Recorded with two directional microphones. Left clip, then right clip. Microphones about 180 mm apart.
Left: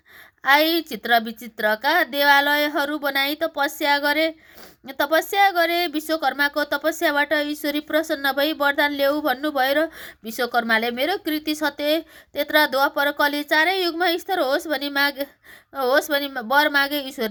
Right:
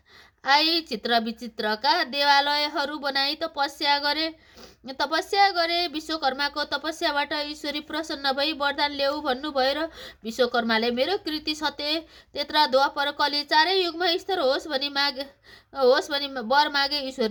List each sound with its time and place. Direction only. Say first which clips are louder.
0.4 s a woman's voice: left 4 dB; 25° left (ahead or behind)